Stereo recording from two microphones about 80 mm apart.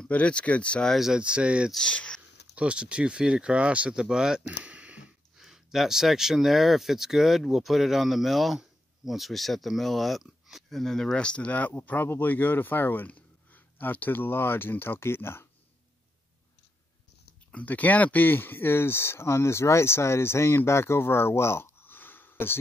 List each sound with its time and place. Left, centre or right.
0.0 s speech: centre
0.9 s speech: centre
1.7 s speech: centre
2.5 s speech: centre
5.4 s speech: centre; by 15.4 s left
17.5 s speech: centre